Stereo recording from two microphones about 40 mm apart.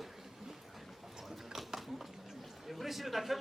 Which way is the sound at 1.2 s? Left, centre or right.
Centre.